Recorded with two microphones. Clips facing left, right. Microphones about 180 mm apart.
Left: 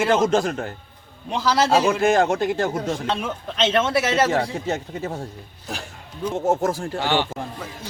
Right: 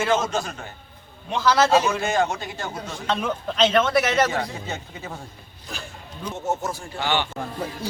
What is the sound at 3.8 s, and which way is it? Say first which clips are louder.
Speech: left 2 dB; 30° left (ahead or behind).